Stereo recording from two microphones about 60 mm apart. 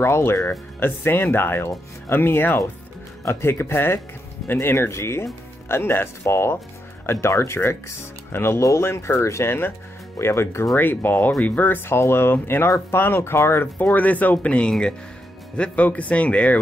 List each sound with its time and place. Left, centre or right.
0.0 s speech: left
9.5 s speech: left
10.8 s speech: left
13.7 s speech: left